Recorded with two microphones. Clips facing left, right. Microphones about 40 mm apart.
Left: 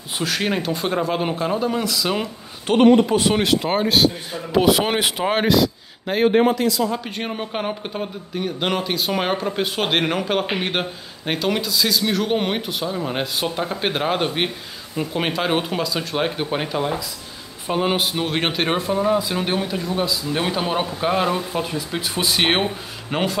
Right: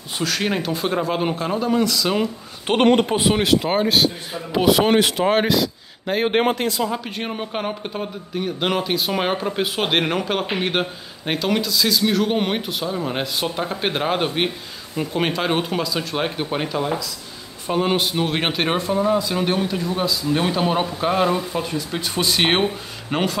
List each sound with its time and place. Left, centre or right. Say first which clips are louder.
0.2 s speech: even; centre
2.8 s speech: left 3 dB; right
3.2 s a man's voice: right 1 dB; centre
6.3 s speech: left 2 dB; right
6.9 s speech: even; centre